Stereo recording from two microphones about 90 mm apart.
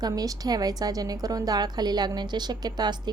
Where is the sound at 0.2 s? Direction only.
45° right (ahead or behind).